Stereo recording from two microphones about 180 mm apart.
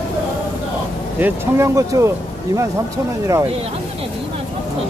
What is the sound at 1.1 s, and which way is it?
Speech, 10° right (ahead or behind).